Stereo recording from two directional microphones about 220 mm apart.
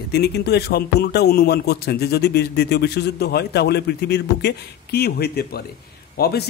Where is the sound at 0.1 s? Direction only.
45° left (ahead or behind).